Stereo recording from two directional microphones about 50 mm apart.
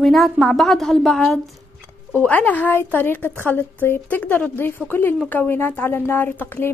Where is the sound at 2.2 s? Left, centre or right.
Left.